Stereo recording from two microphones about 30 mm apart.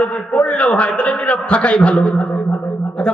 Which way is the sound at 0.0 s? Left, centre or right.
Left.